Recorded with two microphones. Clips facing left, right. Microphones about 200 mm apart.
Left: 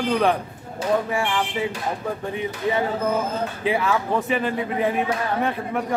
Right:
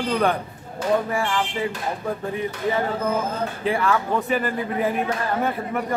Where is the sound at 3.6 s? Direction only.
Centre (ahead or behind).